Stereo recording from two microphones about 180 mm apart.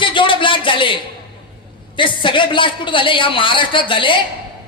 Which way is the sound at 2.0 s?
25° left (ahead or behind).